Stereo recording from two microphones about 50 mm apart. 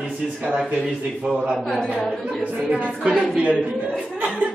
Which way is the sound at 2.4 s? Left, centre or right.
Right.